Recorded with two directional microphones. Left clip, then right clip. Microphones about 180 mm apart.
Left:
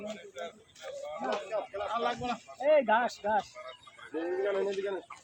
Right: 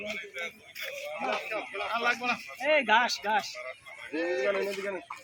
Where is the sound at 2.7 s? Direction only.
40° left (ahead or behind).